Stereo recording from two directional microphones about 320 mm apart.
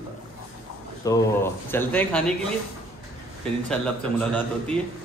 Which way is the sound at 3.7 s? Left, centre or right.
Centre.